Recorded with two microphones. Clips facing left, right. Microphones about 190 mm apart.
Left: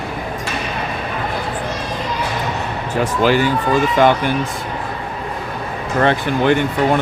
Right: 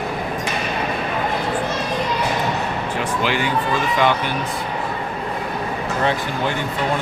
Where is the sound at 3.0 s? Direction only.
40° left (ahead or behind).